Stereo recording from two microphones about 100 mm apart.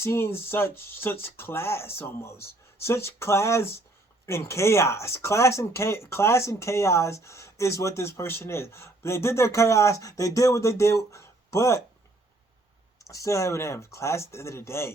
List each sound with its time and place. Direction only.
0.0 s speech: 25° left (ahead or behind)
13.1 s speech: 30° left (ahead or behind)